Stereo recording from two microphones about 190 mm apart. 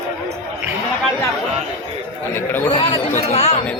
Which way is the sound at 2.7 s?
30° left (ahead or behind).